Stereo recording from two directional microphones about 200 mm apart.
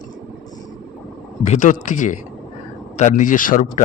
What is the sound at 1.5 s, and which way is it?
A man's voice, 40° left (ahead or behind).